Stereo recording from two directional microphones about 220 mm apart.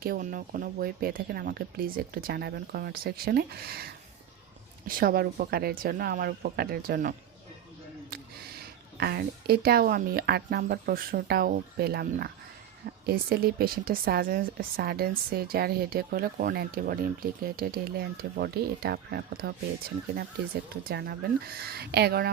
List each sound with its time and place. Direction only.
0.0 s a woman's voice: 40° right (ahead or behind)
4.9 s a woman's voice: 40° right (ahead or behind)
9.0 s a woman's voice: 45° right (ahead or behind)